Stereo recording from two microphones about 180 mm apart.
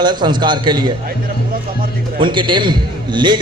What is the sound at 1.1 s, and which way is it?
Speech, 50° right (ahead or behind).